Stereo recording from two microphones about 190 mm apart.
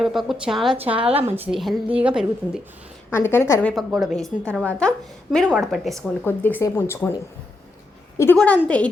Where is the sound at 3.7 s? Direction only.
Centre (ahead or behind).